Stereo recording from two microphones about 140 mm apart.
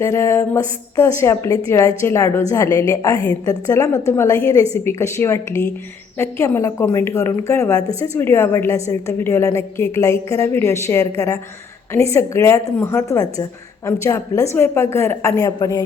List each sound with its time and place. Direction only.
0.0 s a woman's voice: 20° left (ahead or behind)